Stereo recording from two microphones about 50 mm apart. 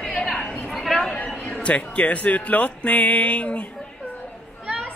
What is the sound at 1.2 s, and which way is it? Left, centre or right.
A man's voice, left.